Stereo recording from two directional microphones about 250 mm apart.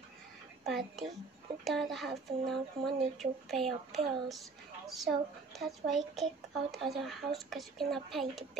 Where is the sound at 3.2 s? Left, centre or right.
Centre.